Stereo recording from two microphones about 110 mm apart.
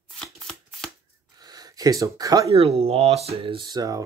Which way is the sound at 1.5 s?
35° right (ahead or behind).